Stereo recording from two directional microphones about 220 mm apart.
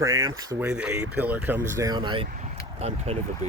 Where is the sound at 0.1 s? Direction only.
65° right (ahead or behind).